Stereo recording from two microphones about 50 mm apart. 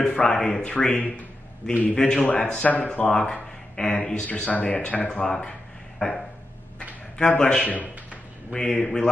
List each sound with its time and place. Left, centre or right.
0.0 s speech: centre
1.8 s speech: centre
5.0 s speech: centre